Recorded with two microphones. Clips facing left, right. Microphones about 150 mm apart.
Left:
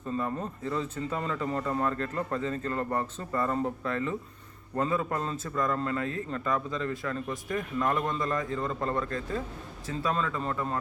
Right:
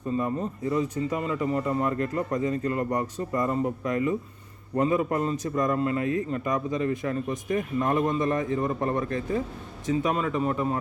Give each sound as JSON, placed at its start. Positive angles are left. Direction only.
{"t": 0.2, "sound": "speech", "side_deg": -15}